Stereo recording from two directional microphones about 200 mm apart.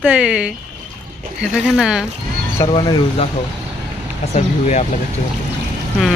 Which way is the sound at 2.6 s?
25° left (ahead or behind).